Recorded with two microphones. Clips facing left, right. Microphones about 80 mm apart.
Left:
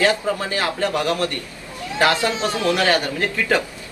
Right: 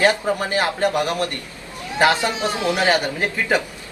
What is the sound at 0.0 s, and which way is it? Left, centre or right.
Speech, right.